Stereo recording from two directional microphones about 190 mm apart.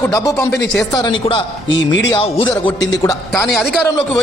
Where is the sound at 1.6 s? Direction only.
75° left (ahead or behind).